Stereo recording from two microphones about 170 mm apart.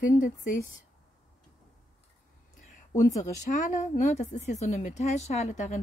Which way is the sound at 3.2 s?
45° left (ahead or behind).